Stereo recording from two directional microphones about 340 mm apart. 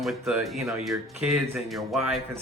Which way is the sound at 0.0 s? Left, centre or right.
Centre.